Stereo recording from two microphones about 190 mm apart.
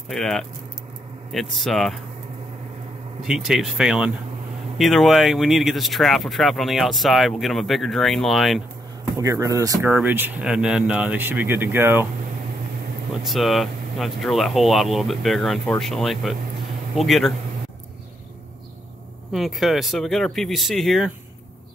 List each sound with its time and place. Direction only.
0.1 s speech: 5° left (ahead or behind)
3.2 s speech: 5° right (ahead or behind)
9.1 s speech: 15° right (ahead or behind)
13.2 s speech: centre (ahead or behind)
19.3 s speech: centre (ahead or behind)